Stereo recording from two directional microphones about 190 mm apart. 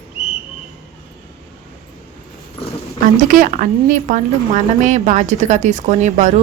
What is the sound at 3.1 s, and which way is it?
A woman's voice, 45° right (ahead or behind).